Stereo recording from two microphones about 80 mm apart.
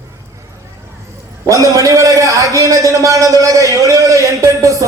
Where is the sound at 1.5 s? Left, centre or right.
Right.